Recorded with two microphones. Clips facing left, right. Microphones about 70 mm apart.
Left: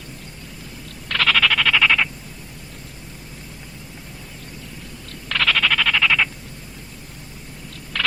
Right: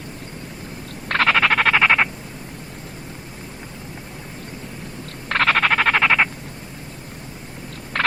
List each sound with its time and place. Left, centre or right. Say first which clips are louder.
1.0 s frog: right 2 dB; right
5.3 s frog: right 3 dB; right
7.9 s a sound: right 3 dB; right